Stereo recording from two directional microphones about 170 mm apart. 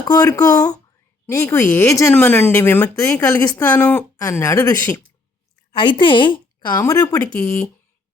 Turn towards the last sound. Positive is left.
turn(degrees=15)  # may be behind; listen again after turning